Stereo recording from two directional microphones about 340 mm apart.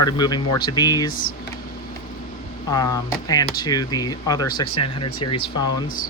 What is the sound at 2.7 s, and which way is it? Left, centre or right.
Speech, centre.